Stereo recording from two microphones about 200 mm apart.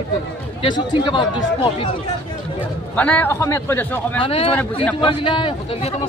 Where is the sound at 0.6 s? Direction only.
25° left (ahead or behind).